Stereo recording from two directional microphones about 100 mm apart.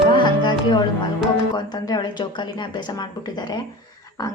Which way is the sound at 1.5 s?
40° left (ahead or behind).